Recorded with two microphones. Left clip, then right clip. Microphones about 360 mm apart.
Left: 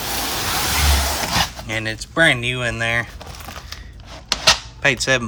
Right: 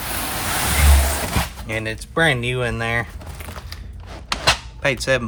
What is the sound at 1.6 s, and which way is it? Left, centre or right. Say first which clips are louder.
Speech: left 1 dB; centre.